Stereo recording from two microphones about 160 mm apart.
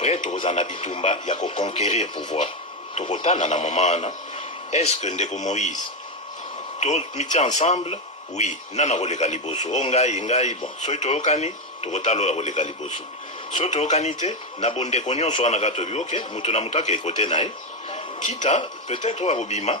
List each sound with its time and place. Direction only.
0.0 s radio: 45° left (ahead or behind)
0.3 s a man's voice: 40° left (ahead or behind)
6.7 s speech: 45° left (ahead or behind)